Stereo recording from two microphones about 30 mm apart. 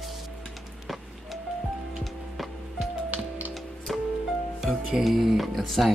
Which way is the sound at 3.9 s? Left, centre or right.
Centre.